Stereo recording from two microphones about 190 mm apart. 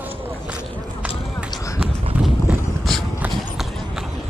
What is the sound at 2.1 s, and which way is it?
Clip-clop, 10° right (ahead or behind).